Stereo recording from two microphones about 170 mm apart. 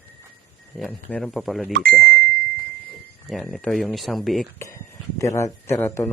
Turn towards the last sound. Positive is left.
turn(degrees=10)  # may be behind; listen again after turning